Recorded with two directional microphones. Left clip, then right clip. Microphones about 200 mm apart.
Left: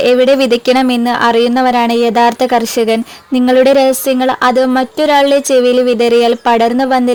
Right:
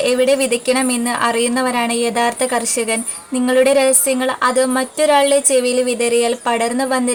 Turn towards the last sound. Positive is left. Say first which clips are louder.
# left 7 dB
turn(degrees=35)  # may be behind; listen again after turning